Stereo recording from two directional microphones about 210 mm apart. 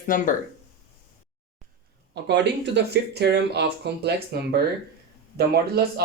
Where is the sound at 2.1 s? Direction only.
55° right (ahead or behind).